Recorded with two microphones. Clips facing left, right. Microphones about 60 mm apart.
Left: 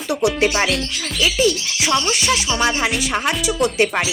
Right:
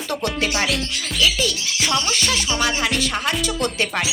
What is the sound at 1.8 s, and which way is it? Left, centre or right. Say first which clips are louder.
Speech: left 3 dB; centre.